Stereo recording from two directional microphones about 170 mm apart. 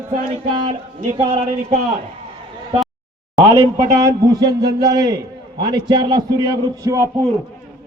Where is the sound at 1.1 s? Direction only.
35° right (ahead or behind).